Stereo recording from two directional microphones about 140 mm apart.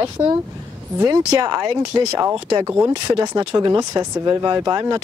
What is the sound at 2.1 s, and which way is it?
Speech, 20° right (ahead or behind).